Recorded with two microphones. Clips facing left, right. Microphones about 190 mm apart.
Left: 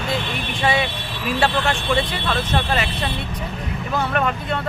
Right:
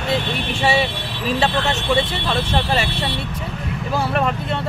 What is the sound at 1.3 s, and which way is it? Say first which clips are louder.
Speech: right 1 dB; 20° right (ahead or behind).